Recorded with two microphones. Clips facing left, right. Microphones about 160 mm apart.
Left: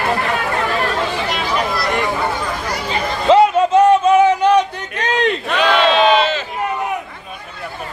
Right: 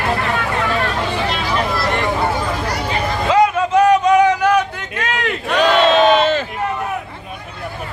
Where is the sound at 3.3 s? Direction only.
30° left (ahead or behind).